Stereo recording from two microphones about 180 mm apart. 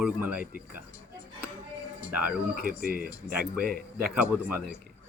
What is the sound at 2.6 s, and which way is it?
Speech, 55° right (ahead or behind).